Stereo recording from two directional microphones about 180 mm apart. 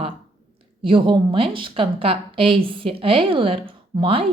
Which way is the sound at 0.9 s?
25° right (ahead or behind).